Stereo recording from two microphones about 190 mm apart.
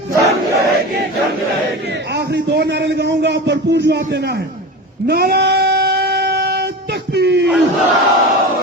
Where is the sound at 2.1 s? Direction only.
60° right (ahead or behind).